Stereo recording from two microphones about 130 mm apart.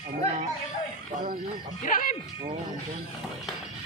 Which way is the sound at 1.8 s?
90° left.